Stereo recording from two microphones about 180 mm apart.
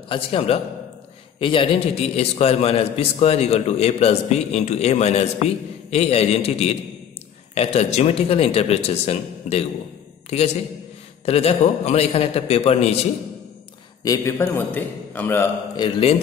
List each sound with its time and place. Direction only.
0.1 s a man's voice: 30° left (ahead or behind)
11.2 s a man's voice: 35° left (ahead or behind)
14.0 s a man's voice: 20° left (ahead or behind)
15.7 s a man's voice: 30° left (ahead or behind)